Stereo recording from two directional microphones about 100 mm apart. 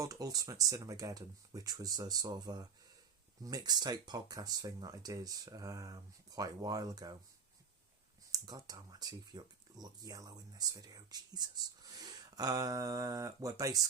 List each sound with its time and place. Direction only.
0.0 s speech: 35° right (ahead or behind)
8.3 s speech: 40° right (ahead or behind)